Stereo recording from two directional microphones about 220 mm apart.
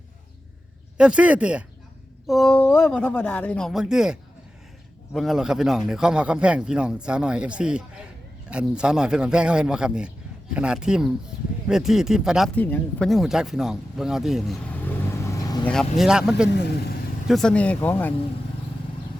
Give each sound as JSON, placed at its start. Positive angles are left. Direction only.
{"t": 0.9, "sound": "speech", "side_deg": -5}
{"t": 12.5, "sound": "speech", "side_deg": 10}
{"t": 15.6, "sound": "speech", "side_deg": 5}
{"t": 16.5, "sound": "speech", "side_deg": 50}
{"t": 17.2, "sound": "speech", "side_deg": 0}